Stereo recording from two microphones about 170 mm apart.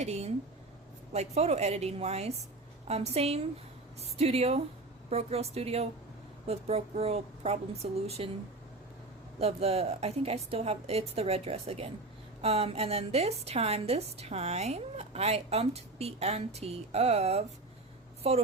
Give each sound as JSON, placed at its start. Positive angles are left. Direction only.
{"t": 0.0, "sound": "a woman's voice", "side_deg": -40}
{"t": 9.4, "sound": "a woman's voice", "side_deg": -35}